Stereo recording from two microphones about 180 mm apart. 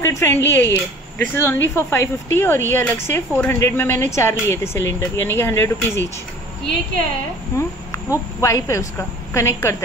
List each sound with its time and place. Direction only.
0.0 s speech: 15° left (ahead or behind)
7.5 s speech: 15° left (ahead or behind)